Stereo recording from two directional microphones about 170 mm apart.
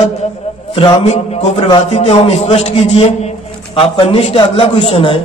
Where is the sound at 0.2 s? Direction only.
35° left (ahead or behind).